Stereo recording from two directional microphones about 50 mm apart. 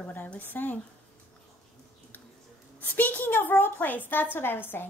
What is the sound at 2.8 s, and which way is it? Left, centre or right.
A woman's voice, left.